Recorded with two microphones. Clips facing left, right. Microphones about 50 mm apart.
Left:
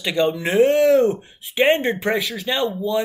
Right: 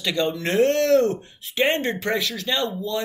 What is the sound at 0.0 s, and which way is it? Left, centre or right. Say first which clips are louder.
Speech: left 4 dB; centre.